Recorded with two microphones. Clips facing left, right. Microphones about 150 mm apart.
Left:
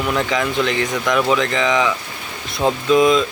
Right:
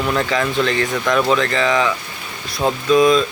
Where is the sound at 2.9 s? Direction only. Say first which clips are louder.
Right 1 dB; 20° left (ahead or behind).